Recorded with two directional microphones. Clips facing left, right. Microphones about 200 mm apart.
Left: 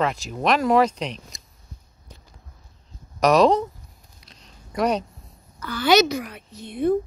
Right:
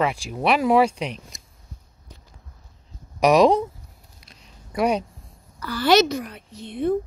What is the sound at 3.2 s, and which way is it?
Speech, 15° right (ahead or behind).